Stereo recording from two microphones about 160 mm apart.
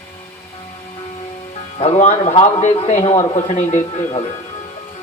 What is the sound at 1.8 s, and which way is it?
A man's voice, 40° left (ahead or behind).